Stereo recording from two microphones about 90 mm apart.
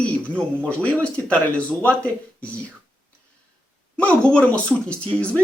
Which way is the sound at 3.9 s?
15° left (ahead or behind).